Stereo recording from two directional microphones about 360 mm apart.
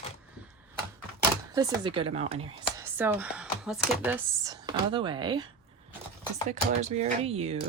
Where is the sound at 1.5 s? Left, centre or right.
Centre.